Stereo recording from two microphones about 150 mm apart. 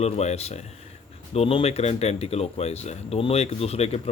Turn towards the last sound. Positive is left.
turn(degrees=45)  # may be behind; listen again after turning